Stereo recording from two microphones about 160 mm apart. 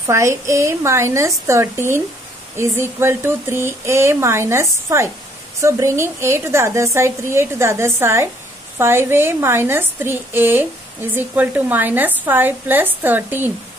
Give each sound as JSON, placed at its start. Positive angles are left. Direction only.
{"t": 0.0, "sound": "a woman's voice", "side_deg": -20}